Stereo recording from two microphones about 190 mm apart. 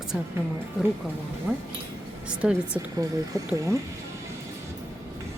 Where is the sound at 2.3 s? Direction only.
5° right (ahead or behind).